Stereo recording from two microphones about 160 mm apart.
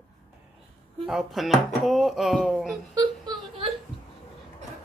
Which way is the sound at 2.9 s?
25° right (ahead or behind).